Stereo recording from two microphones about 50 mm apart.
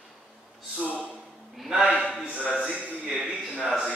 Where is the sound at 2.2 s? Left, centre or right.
Centre.